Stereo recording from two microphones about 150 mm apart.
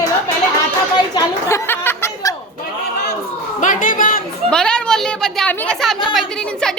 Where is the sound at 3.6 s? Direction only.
65° left (ahead or behind).